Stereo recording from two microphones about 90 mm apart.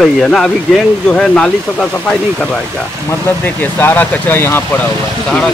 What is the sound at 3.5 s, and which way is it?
Speech, 20° left (ahead or behind).